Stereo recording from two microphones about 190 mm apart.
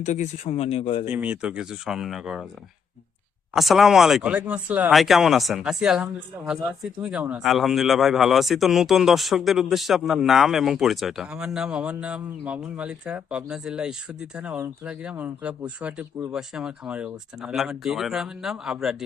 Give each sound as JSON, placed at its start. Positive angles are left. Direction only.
{"t": 0.0, "sound": "speech", "side_deg": 40}
{"t": 1.0, "sound": "a man's voice", "side_deg": -5}
{"t": 3.5, "sound": "a man's voice", "side_deg": 0}